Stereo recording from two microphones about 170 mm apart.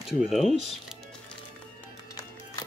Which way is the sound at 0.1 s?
Centre (ahead or behind).